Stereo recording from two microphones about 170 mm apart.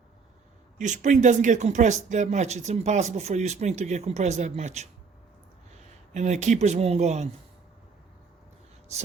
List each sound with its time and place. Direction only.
0.8 s speech: 45° right (ahead or behind)
6.1 s speech: 45° right (ahead or behind)